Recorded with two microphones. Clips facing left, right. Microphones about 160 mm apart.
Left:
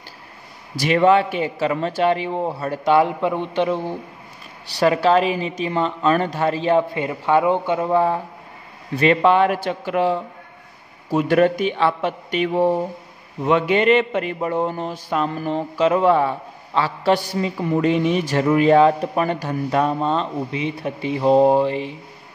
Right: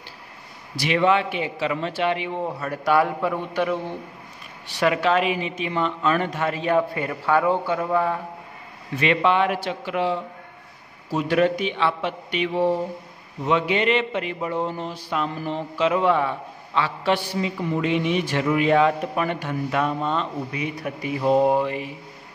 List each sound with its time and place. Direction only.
0.7 s speech: 45° left (ahead or behind); by 3.8 s 25° left (ahead or behind)
4.7 s speech: 35° left (ahead or behind)
8.9 s a man's voice: 40° left (ahead or behind)